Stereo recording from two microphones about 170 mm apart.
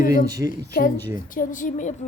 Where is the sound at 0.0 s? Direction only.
55° left (ahead or behind).